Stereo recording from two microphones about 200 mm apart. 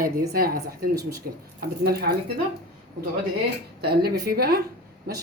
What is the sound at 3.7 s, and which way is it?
Speech, 50° right (ahead or behind).